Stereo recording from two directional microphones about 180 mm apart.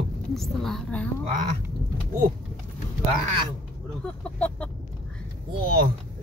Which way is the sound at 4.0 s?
5° left (ahead or behind).